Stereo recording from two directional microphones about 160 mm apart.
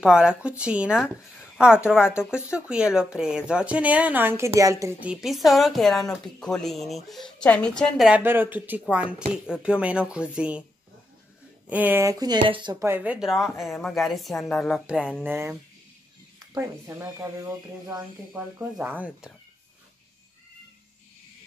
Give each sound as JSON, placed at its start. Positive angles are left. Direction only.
{"t": 0.0, "sound": "speech", "side_deg": -5}
{"t": 5.0, "sound": "speech", "side_deg": -5}
{"t": 8.1, "sound": "speech", "side_deg": -15}
{"t": 11.7, "sound": "speech", "side_deg": -10}
{"t": 12.8, "sound": "speech", "side_deg": -10}
{"t": 16.5, "sound": "speech", "side_deg": -20}